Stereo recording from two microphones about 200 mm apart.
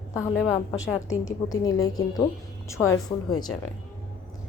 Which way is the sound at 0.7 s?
70° left (ahead or behind).